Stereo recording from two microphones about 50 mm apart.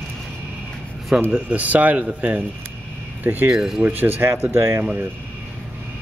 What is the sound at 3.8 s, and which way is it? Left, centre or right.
Speech, right.